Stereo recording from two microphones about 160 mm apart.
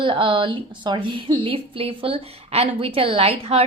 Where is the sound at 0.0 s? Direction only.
30° right (ahead or behind).